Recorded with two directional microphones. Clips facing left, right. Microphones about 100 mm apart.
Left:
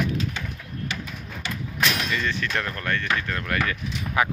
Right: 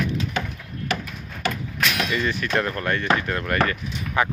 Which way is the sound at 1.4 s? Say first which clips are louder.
Right 7 dB; 55° right (ahead or behind).